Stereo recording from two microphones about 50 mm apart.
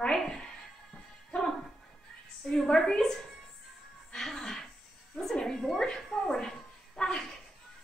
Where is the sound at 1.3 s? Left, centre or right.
Centre.